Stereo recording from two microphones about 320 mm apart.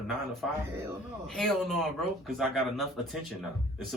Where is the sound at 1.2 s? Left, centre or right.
Centre.